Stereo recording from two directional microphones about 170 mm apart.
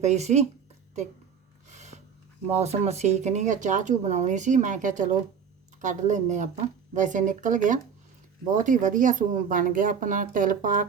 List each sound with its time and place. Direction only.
0.0 s speech: 40° right (ahead or behind)
1.7 s a sound: 45° right (ahead or behind)
2.5 s speech: 40° right (ahead or behind)